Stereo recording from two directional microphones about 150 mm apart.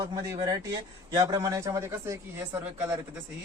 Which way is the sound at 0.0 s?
25° right (ahead or behind).